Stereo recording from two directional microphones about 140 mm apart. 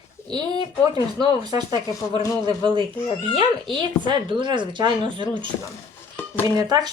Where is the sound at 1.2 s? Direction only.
30° right (ahead or behind).